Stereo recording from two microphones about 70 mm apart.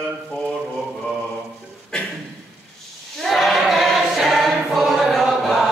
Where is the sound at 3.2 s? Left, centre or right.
Centre.